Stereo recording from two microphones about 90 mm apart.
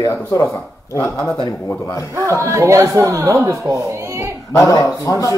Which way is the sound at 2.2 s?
35° right (ahead or behind).